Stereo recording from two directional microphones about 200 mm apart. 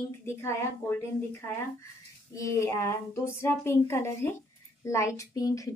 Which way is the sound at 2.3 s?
15° left (ahead or behind).